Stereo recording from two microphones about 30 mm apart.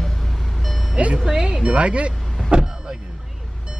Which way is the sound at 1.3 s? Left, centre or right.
Right.